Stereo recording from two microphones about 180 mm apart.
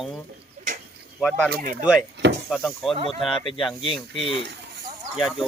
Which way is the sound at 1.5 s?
55° right (ahead or behind).